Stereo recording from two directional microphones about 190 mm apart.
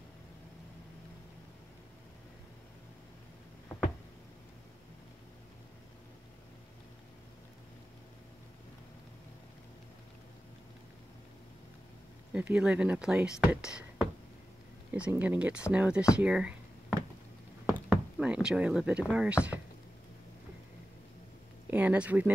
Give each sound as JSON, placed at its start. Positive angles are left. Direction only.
{"t": 12.3, "sound": "speech", "side_deg": -5}
{"t": 21.6, "sound": "speech", "side_deg": -10}